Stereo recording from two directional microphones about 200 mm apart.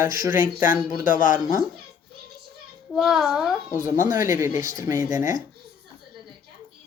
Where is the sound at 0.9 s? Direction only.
40° left (ahead or behind).